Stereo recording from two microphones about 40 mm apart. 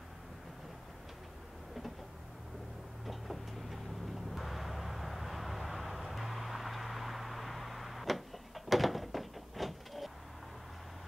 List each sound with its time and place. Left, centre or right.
3.1 s vehicle: centre